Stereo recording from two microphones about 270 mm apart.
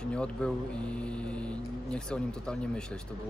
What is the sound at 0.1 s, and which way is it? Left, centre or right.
Speech, centre.